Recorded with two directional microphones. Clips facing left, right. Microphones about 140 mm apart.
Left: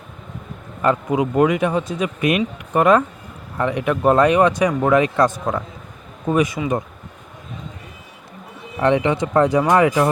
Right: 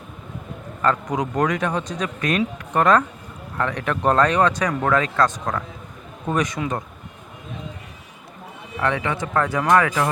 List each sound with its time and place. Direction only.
0.8 s speech: 10° left (ahead or behind)
8.8 s speech: 25° left (ahead or behind)